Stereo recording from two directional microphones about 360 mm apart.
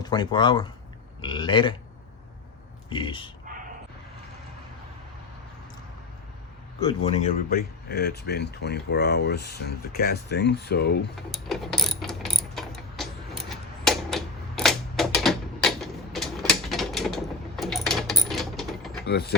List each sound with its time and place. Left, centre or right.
0.0 s speech: centre
2.9 s speech: centre
3.5 s a sound: right
6.7 s speech: centre
11.3 s ratchet: centre
17.6 s mechanisms: centre
19.0 s mechanisms: left